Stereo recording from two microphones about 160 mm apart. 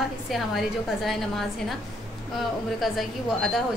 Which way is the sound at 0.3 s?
Centre (ahead or behind).